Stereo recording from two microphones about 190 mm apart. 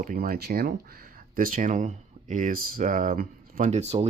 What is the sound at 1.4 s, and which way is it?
Speech, 45° right (ahead or behind).